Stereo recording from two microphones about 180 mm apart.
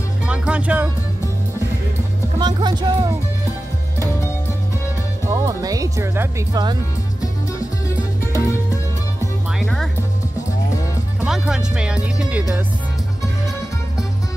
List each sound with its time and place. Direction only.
0.3 s music: 5° right (ahead or behind)
2.3 s speech: 25° right (ahead or behind)
5.2 s speech: 20° right (ahead or behind)
8.2 s music: 15° left (ahead or behind)
9.6 s music: centre (ahead or behind)
11.1 s speech: 5° right (ahead or behind)